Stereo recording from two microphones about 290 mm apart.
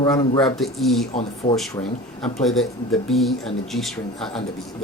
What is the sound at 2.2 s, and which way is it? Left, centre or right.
Speech, centre.